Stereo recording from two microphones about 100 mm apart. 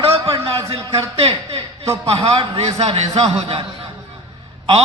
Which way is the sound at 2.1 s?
70° right (ahead or behind).